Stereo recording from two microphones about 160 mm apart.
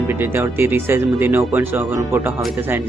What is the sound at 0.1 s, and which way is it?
Speech, 15° right (ahead or behind).